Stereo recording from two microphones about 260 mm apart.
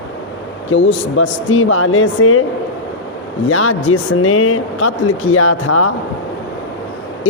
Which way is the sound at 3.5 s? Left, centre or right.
Left.